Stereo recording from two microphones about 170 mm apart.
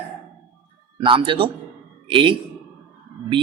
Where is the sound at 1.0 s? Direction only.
30° right (ahead or behind).